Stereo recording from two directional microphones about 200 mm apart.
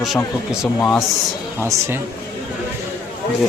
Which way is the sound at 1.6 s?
15° right (ahead or behind).